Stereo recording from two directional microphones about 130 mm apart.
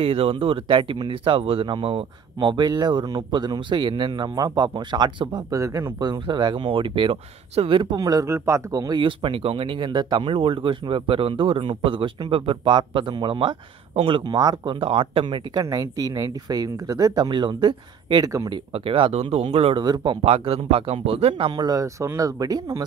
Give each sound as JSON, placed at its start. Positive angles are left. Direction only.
{"t": 0.0, "sound": "speech", "side_deg": -45}
{"t": 2.5, "sound": "speech", "side_deg": -30}
{"t": 18.7, "sound": "speech", "side_deg": -45}